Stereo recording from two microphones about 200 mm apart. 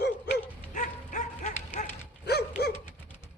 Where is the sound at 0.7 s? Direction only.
40° left (ahead or behind).